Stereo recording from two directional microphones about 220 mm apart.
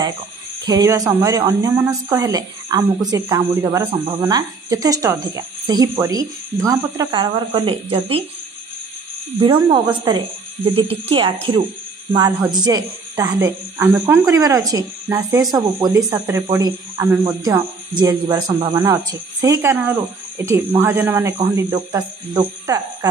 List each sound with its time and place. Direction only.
0.7 s speech: 15° right (ahead or behind)
9.7 s speech: 20° right (ahead or behind)
12.1 s speech: 10° right (ahead or behind)